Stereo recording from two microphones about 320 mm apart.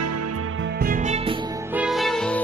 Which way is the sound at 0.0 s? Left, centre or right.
Right.